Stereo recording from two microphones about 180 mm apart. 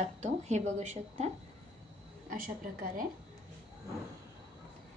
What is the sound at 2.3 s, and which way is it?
Speech, 50° right (ahead or behind).